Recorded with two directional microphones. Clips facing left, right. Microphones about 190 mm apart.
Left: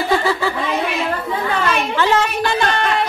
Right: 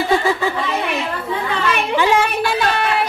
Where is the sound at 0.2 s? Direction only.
15° right (ahead or behind).